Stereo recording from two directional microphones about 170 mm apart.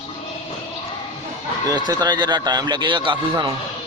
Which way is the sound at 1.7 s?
20° right (ahead or behind).